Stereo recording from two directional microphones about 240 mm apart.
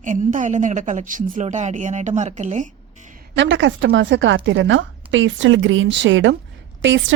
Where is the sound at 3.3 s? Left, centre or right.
Right.